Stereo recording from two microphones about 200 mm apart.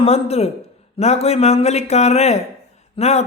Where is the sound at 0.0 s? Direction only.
30° left (ahead or behind).